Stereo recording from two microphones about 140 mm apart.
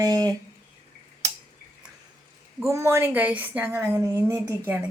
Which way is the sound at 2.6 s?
20° right (ahead or behind).